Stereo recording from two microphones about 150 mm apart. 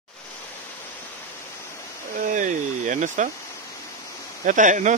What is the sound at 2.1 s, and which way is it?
Speech, 60° right (ahead or behind).